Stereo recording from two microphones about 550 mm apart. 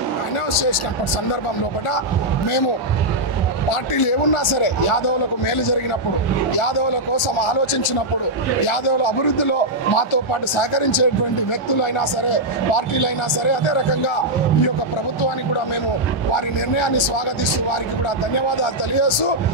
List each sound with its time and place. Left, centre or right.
3.9 s a man's voice: left
16.3 s a man's voice: left
18.6 s a man's voice: left